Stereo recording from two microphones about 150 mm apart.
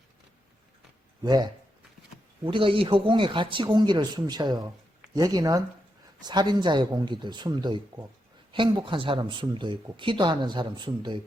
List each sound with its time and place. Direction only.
1.2 s speech: 25° right (ahead or behind)